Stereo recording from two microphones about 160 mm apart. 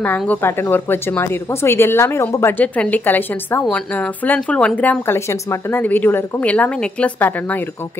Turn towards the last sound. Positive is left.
turn(degrees=10)  # may be behind; listen again after turning